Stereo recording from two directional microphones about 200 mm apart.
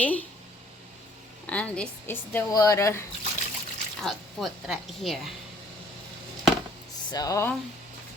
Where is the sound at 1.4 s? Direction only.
5° left (ahead or behind).